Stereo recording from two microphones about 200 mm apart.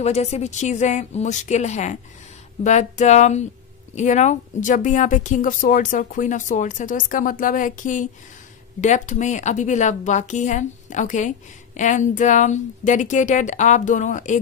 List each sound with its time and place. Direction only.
0.0 s a woman's voice: 30° left (ahead or behind)